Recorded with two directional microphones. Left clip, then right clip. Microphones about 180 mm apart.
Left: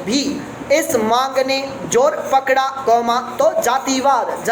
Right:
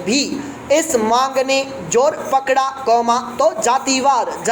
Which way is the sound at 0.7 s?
35° right (ahead or behind).